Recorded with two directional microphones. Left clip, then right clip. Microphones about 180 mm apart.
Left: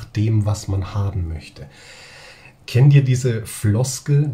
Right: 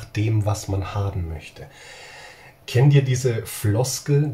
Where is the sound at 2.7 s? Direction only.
15° left (ahead or behind).